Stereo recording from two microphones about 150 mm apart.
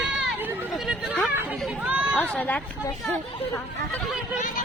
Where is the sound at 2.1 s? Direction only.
10° left (ahead or behind).